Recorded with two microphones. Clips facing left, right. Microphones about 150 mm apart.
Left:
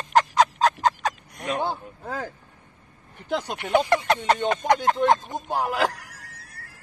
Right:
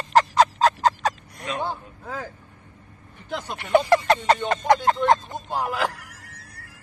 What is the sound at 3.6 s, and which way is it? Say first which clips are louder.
Speech: right 4 dB; centre (ahead or behind).